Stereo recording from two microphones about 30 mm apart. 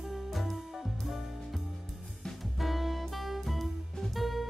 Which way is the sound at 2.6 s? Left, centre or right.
Centre.